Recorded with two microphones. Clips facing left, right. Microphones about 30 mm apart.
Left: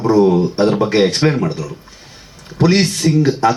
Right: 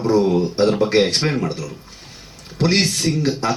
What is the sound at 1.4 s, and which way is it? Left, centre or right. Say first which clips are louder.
Speech: left 4 dB; left.